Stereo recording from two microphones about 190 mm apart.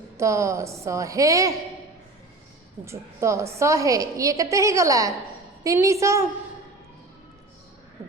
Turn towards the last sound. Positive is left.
turn(degrees=-15)  # may be behind; listen again after turning